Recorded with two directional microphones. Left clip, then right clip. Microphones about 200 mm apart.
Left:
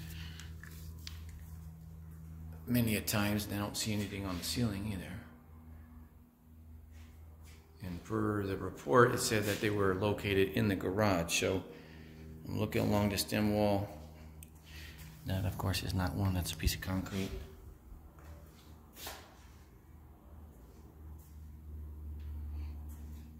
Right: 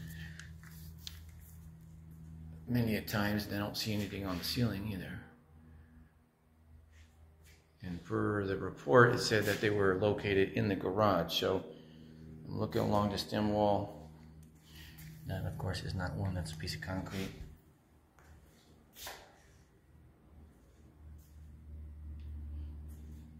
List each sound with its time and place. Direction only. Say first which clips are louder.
2.7 s speech: left 1 dB; 35° left (ahead or behind); by 5.1 s 15° left (ahead or behind)
7.8 s speech: even; 10° left (ahead or behind); by 13.7 s 35° left (ahead or behind)
15.2 s speech: left 3 dB; 35° left (ahead or behind)